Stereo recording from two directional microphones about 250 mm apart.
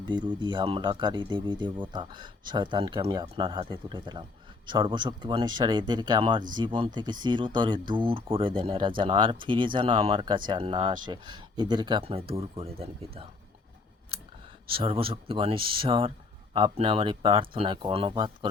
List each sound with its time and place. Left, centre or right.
0.1 s speech: centre
14.7 s speech: right